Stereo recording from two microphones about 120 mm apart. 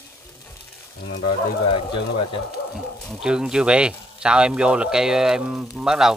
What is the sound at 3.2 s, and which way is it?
Speech, 5° right (ahead or behind).